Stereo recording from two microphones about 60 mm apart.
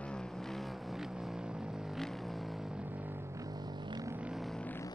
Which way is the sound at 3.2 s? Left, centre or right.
Right.